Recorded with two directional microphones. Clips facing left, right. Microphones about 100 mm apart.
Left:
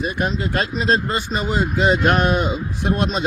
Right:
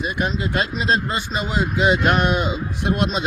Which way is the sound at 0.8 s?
40° left (ahead or behind).